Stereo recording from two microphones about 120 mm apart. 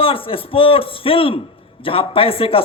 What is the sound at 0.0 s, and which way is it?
A man's voice, 50° left (ahead or behind).